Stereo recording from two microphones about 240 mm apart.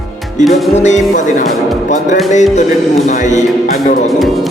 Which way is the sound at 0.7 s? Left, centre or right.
Left.